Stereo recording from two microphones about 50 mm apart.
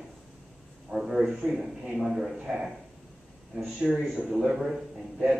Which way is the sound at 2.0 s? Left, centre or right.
Centre.